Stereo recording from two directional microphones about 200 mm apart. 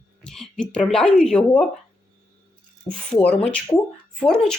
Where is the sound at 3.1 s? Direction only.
5° left (ahead or behind).